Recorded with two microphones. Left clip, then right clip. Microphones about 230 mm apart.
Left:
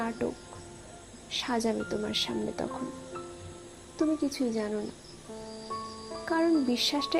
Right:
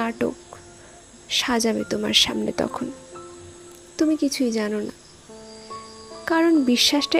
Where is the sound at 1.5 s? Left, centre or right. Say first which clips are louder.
Right 7 dB; right.